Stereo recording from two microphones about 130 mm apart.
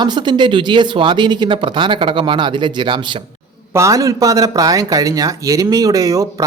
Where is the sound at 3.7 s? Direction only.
25° right (ahead or behind).